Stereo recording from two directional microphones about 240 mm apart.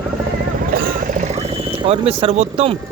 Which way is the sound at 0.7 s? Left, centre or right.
Right.